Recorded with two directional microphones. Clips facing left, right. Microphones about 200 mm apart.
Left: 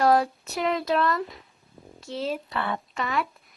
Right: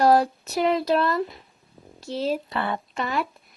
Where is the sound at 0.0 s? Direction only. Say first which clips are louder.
Right 3 dB; 35° right (ahead or behind).